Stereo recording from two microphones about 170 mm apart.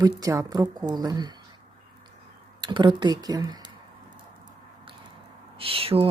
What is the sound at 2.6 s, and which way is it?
Speech, 25° right (ahead or behind).